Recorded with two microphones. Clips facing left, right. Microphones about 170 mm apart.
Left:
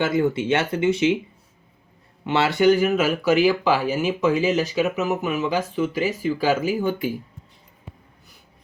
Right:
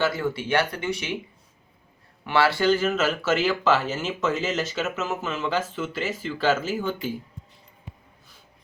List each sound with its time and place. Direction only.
0.0 s speech: 20° left (ahead or behind)
2.2 s speech: 20° left (ahead or behind)